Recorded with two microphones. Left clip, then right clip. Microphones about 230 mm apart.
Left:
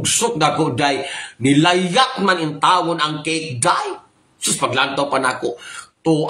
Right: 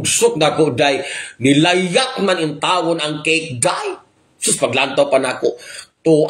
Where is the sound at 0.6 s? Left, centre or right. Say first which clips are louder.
Right 3 dB; centre.